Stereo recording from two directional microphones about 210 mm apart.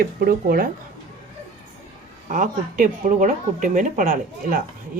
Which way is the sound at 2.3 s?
40° right (ahead or behind).